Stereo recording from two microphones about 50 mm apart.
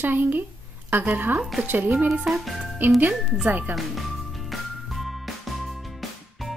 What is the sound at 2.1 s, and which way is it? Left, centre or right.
Speech, centre.